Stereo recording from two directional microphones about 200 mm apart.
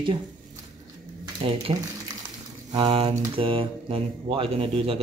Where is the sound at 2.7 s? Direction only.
25° right (ahead or behind).